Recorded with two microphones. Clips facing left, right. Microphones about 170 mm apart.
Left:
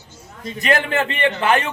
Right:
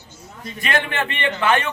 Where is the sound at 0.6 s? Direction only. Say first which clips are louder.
Left 4 dB; 35° left (ahead or behind).